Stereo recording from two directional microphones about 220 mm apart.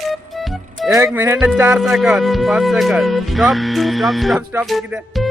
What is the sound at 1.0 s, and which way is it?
Speech, 10° right (ahead or behind).